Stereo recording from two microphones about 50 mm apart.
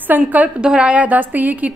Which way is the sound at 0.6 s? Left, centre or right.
Centre.